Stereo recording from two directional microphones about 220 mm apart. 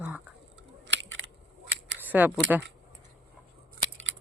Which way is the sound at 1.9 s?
10° right (ahead or behind).